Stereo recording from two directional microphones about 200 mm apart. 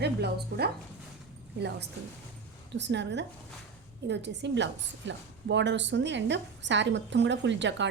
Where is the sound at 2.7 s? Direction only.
60° right (ahead or behind).